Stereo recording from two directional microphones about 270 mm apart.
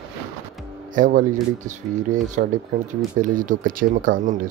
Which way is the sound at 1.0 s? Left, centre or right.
Right.